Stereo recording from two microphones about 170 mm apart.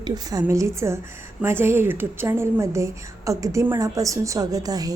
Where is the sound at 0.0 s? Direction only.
20° right (ahead or behind).